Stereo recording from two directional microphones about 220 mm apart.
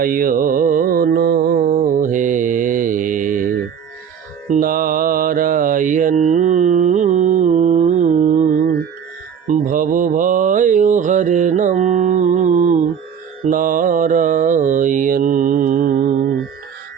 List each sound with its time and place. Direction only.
0.0 s carnatic music: 40° right (ahead or behind)
4.4 s mantra: 35° right (ahead or behind)